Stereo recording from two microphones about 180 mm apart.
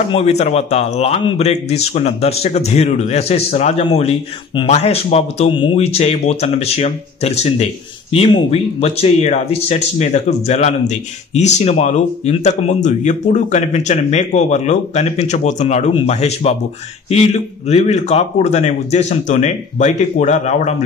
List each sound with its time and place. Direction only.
0.1 s speech: 35° left (ahead or behind)